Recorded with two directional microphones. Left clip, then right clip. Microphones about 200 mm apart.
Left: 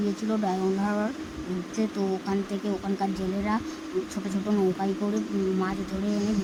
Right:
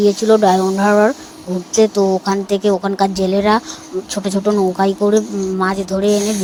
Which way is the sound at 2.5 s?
35° right (ahead or behind).